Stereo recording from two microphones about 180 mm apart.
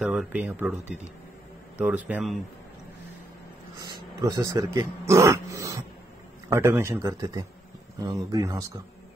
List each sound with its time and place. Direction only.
0.0 s speech: 5° right (ahead or behind)
2.0 s speech: 10° right (ahead or behind)
4.2 s speech: 20° right (ahead or behind)